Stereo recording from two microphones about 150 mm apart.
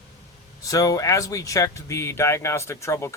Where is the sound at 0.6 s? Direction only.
25° left (ahead or behind).